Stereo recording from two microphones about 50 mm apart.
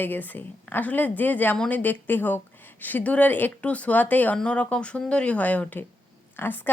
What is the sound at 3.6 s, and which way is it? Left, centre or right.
Speech, left.